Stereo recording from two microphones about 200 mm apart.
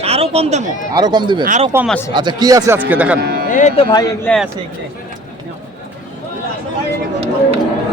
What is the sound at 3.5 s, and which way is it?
Speech, 35° left (ahead or behind).